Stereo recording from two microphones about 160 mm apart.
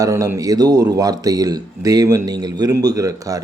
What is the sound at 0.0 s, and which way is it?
A man's voice, 20° right (ahead or behind).